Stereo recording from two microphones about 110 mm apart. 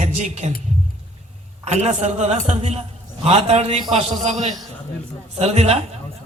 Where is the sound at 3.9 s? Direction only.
90° right.